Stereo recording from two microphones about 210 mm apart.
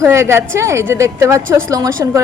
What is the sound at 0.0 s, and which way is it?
A woman's voice, 15° right (ahead or behind).